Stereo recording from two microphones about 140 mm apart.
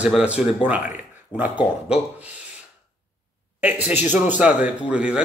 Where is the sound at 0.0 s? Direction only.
10° right (ahead or behind).